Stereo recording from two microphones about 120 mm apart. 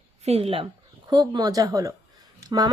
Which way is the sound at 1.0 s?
35° right (ahead or behind).